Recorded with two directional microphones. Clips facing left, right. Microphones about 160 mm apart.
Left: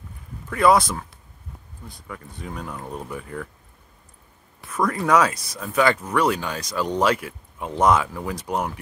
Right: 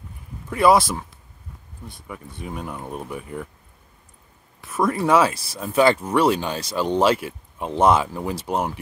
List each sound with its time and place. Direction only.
0.5 s speech: 10° right (ahead or behind)
0.7 s speech: 25° right (ahead or behind)
4.6 s speech: 25° right (ahead or behind)